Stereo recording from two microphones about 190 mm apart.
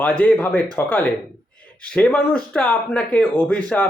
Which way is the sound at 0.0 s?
5° left (ahead or behind).